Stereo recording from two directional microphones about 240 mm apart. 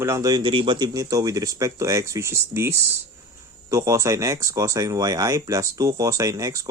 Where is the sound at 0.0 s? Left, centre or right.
Centre.